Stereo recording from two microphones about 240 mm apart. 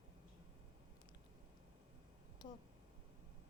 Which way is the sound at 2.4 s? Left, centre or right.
Centre.